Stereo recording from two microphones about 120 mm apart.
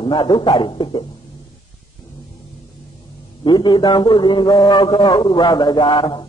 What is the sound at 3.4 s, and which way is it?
A man's voice, 40° left (ahead or behind).